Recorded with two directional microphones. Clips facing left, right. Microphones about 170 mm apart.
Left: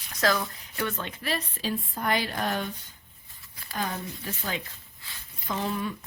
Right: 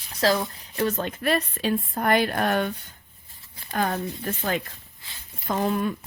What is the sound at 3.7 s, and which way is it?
A woman's voice, 60° right (ahead or behind).